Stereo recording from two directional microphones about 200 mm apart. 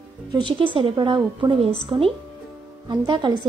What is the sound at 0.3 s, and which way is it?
A woman's voice, 25° right (ahead or behind).